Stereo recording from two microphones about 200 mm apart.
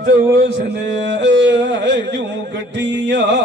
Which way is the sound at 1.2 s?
65° right (ahead or behind).